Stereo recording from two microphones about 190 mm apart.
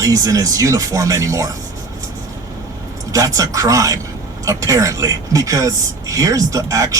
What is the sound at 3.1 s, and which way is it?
A woman's voice, 15° right (ahead or behind).